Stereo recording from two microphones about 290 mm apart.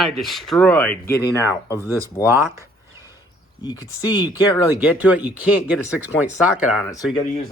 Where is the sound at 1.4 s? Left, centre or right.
Centre.